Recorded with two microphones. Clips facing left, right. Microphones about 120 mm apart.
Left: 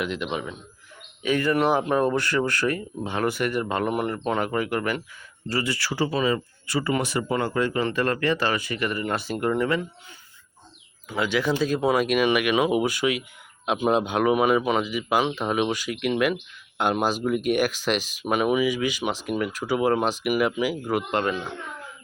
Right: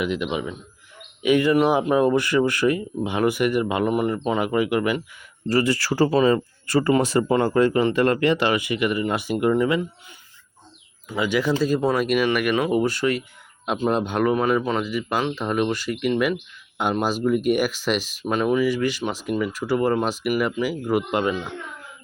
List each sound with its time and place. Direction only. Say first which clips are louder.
0.0 s speech: right 3 dB; 5° right (ahead or behind)
1.2 s speech: right 5 dB; 20° right (ahead or behind)
1.5 s speech: right 3 dB; 5° right (ahead or behind)
5.5 s speech: right 6 dB; 35° right (ahead or behind)
7.8 s speech: right 5 dB; 20° right (ahead or behind)
11.1 s speech: right 2 dB; 10° right (ahead or behind)
12.5 s speech: even; 15° left (ahead or behind)
12.8 s speech: right 2 dB; 5° left (ahead or behind)